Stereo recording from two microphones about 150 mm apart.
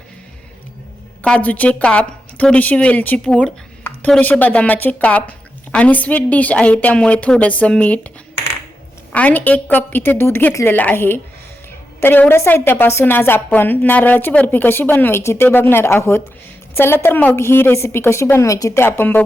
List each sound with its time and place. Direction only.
1.2 s a woman's voice: 10° left (ahead or behind)
9.1 s a woman's voice: 10° left (ahead or behind)